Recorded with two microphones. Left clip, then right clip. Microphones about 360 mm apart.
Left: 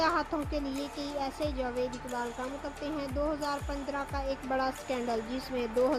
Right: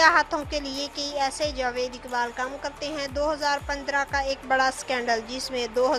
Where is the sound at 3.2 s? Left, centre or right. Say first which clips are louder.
Right 7 dB; right.